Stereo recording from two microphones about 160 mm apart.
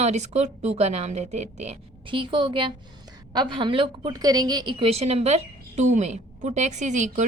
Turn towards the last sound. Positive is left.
turn(degrees=-50)  # may be behind; listen again after turning